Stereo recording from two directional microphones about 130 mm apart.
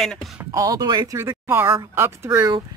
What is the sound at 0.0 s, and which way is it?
Speech, centre (ahead or behind).